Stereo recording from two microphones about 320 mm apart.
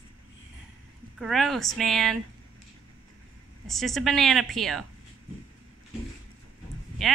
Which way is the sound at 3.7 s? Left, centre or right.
Centre.